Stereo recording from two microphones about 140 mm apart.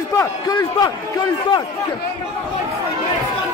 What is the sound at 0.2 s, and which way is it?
Speech, 25° left (ahead or behind).